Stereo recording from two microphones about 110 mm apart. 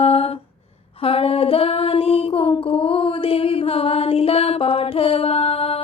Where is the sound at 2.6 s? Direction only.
55° left (ahead or behind).